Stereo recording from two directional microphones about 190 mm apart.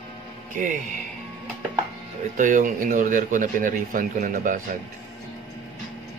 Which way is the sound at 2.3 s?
45° right (ahead or behind).